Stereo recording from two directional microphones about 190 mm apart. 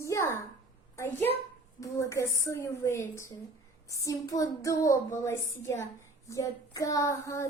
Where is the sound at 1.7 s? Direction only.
15° left (ahead or behind).